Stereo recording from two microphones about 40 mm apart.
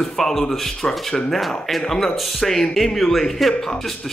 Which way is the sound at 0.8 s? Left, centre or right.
Centre.